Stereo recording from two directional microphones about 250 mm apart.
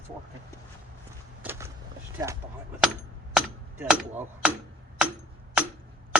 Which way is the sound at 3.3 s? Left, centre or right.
Centre.